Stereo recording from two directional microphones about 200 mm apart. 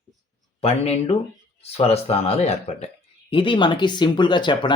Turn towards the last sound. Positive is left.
turn(degrees=25)  # may be behind; listen again after turning